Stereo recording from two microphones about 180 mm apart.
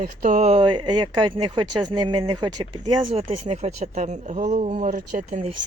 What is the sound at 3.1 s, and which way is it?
Speech, 35° right (ahead or behind).